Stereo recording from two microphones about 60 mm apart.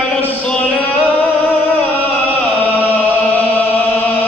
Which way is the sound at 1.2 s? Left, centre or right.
Left.